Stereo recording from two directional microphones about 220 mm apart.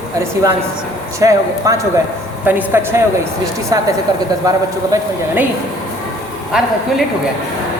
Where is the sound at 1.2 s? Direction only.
15° right (ahead or behind).